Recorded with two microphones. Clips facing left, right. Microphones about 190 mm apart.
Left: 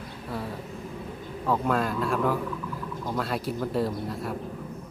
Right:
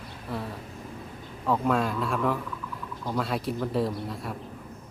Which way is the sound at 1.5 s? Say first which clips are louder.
Even; centre (ahead or behind).